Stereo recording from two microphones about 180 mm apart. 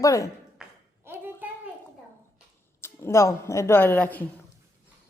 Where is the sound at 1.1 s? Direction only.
10° right (ahead or behind).